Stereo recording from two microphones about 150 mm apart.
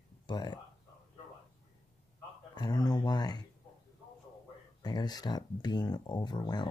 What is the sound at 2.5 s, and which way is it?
Speech, 30° left (ahead or behind).